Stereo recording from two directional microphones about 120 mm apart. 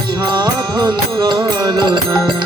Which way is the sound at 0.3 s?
35° right (ahead or behind).